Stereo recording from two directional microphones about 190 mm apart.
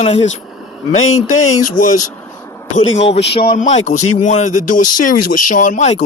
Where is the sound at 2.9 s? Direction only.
35° left (ahead or behind).